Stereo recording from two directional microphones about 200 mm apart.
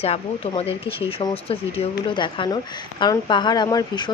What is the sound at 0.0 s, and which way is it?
Speech, 30° left (ahead or behind).